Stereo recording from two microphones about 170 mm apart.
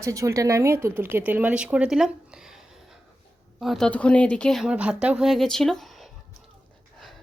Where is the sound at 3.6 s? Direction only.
Centre (ahead or behind).